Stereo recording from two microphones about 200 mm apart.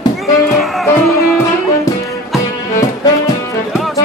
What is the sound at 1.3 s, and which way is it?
Music, 15° left (ahead or behind).